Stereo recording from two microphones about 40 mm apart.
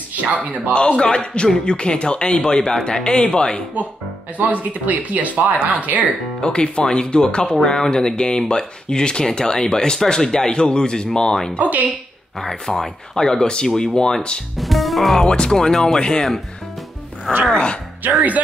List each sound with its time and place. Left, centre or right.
0.1 s speech: right
0.7 s speech: left
4.4 s speech: right
6.4 s speech: left
11.6 s speech: right
12.4 s speech: centre
14.6 s music: centre
15.1 s speech: centre
17.3 s speech: centre